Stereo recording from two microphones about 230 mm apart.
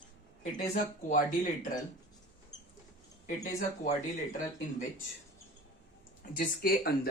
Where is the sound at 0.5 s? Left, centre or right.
Left.